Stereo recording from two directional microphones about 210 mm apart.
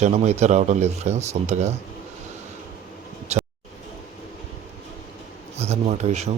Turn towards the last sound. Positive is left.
turn(degrees=-30)  # may be behind; listen again after turning